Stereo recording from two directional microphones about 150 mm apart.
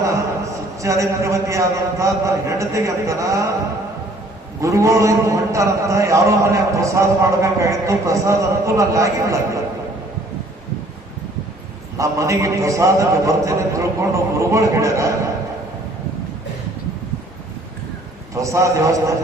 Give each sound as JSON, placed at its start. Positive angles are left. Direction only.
{"t": 0.8, "sound": "a man's voice", "side_deg": -20}
{"t": 4.6, "sound": "a man's voice", "side_deg": -20}
{"t": 11.9, "sound": "a man's voice", "side_deg": -20}
{"t": 18.3, "sound": "a man's voice", "side_deg": -20}